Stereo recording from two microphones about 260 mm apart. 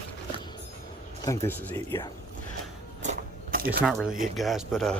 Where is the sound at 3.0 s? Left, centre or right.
Right.